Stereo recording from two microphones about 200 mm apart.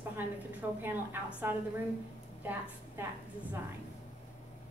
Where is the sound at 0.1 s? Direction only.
10° right (ahead or behind).